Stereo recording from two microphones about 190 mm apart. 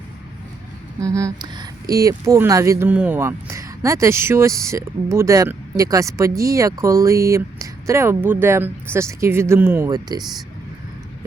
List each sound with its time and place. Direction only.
0.9 s speech: 15° right (ahead or behind)